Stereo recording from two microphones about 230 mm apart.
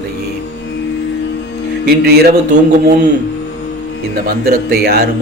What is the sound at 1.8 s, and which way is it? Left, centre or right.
Music, right.